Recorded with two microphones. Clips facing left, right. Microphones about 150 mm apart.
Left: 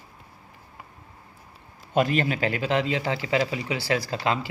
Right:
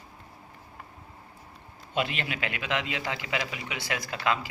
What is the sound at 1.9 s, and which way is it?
A man's voice, 40° left (ahead or behind).